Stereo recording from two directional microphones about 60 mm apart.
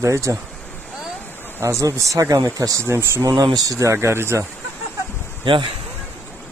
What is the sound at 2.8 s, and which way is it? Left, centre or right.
Speech, right.